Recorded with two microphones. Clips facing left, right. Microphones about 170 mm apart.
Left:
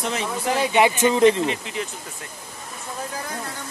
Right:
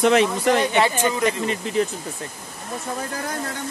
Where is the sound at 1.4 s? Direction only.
40° right (ahead or behind).